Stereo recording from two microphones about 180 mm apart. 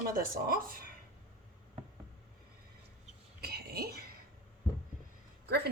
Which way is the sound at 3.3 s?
60° right (ahead or behind).